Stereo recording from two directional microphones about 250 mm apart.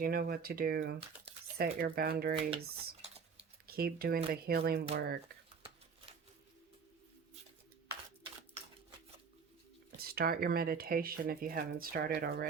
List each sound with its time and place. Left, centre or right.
0.0 s speech: right
3.7 s speech: right
10.0 s speech: right